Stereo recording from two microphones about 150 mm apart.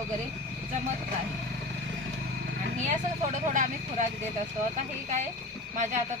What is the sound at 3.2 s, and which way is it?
Speech, 55° right (ahead or behind).